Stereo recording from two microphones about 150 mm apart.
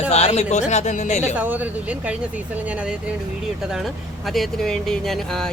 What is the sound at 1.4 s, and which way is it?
Speech, 10° right (ahead or behind).